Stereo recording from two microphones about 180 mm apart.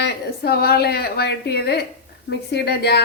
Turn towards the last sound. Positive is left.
turn(degrees=65)  # may be behind; listen again after turning